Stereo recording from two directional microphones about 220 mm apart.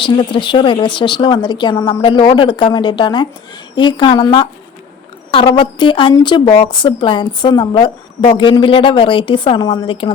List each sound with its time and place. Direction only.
0.0 s a woman's voice: 20° left (ahead or behind)